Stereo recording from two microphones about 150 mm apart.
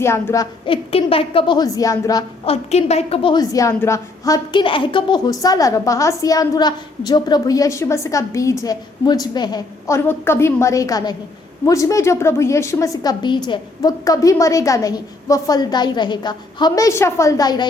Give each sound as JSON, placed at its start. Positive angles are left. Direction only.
{"t": 0.0, "sound": "a woman's voice", "side_deg": 15}
{"t": 0.6, "sound": "a woman's voice", "side_deg": 35}
{"t": 2.4, "sound": "a woman's voice", "side_deg": 45}
{"t": 3.3, "sound": "a woman's voice", "side_deg": 20}
{"t": 4.5, "sound": "a woman's voice", "side_deg": 35}